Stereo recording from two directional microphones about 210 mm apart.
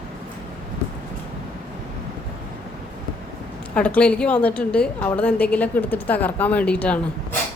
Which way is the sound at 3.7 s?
5° left (ahead or behind).